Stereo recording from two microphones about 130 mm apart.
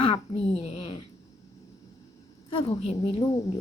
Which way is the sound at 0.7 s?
40° left (ahead or behind).